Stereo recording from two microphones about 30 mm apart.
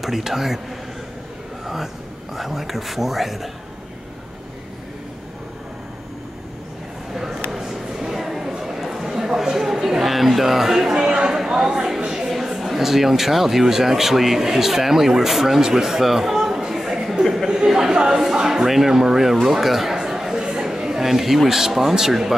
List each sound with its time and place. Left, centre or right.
0.0 s speech: centre
2.3 s speech: centre
7.2 s a sound: centre
12.3 s speech: centre
15.6 s a sound: centre
17.6 s speech: centre
18.7 s speech: centre
19.4 s chatter: centre
20.3 s a sound: right
20.6 s chatter: centre
21.1 s speech: centre